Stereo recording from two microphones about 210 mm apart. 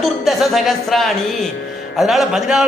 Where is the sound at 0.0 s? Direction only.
Centre (ahead or behind).